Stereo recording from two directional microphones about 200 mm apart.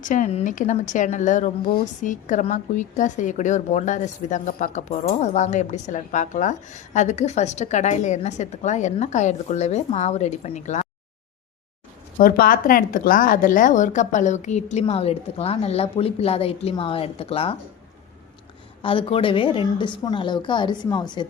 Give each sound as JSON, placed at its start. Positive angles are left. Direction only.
{"t": 0.0, "sound": "speech", "side_deg": 40}
{"t": 12.1, "sound": "speech", "side_deg": 45}
{"t": 18.8, "sound": "a woman's voice", "side_deg": 25}